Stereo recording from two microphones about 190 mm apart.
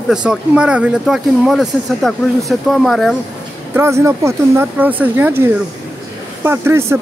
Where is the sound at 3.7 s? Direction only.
15° right (ahead or behind).